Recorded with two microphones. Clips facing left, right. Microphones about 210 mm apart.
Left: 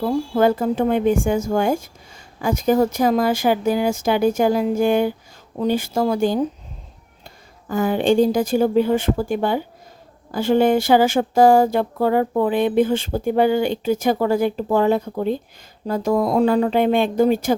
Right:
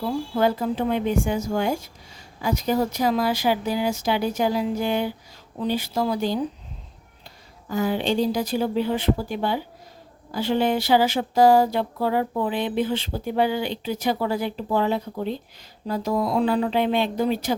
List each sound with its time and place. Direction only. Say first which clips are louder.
0.0 s speech: left 5 dB; 50° left (ahead or behind)